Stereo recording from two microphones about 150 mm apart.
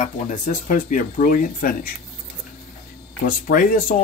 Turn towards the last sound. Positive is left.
turn(degrees=65)  # may be behind; listen again after turning